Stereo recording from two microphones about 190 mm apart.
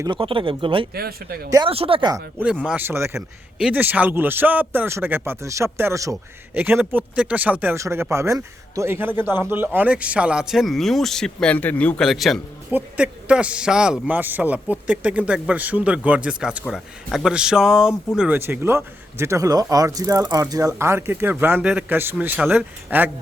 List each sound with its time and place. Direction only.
0.0 s speech: 25° right (ahead or behind)
0.9 s speech: 55° right (ahead or behind)
1.5 s speech: 20° right (ahead or behind)
2.4 s speech: 5° right (ahead or behind)